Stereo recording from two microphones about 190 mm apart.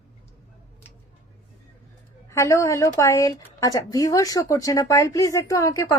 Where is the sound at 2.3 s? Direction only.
15° left (ahead or behind).